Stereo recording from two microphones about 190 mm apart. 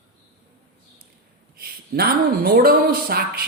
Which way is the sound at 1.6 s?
55° right (ahead or behind).